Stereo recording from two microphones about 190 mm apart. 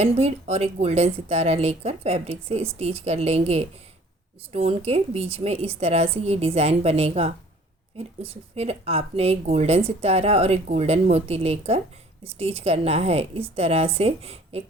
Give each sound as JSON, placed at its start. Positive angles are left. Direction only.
{"t": 0.0, "sound": "a woman's voice", "side_deg": -35}